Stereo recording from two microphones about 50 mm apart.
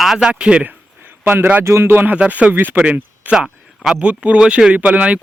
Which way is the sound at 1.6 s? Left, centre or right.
Right.